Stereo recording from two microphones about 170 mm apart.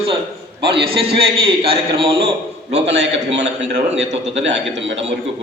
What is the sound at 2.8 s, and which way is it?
A man's voice, 90° right.